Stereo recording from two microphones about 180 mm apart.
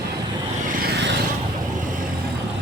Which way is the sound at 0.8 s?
60° right (ahead or behind).